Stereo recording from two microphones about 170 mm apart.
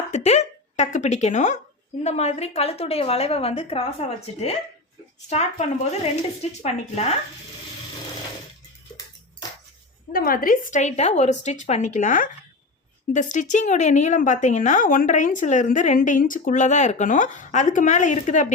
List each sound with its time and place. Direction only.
0.1 s a woman's voice: 40° left (ahead or behind)
5.3 s a woman's voice: 40° left (ahead or behind)
10.1 s a woman's voice: 55° left (ahead or behind)